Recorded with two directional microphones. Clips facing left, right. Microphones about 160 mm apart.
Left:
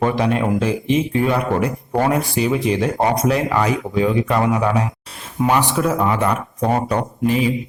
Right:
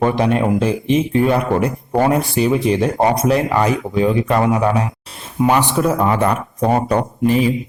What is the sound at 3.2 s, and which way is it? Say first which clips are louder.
A man's voice: right 2 dB; 30° right (ahead or behind).